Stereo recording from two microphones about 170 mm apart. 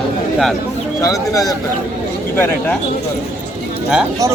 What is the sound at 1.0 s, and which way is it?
Speech, 20° left (ahead or behind).